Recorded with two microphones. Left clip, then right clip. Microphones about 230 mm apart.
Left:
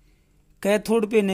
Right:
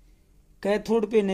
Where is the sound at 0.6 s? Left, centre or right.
Left.